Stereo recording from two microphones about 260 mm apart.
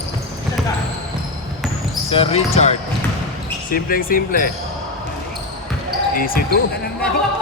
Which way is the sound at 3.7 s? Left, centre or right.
Left.